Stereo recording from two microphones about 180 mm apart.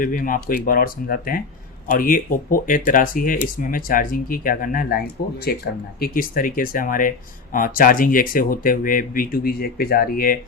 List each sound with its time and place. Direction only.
0.0 s speech: 50° left (ahead or behind)